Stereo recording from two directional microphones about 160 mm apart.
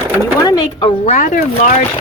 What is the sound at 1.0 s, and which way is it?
Speech, 55° left (ahead or behind).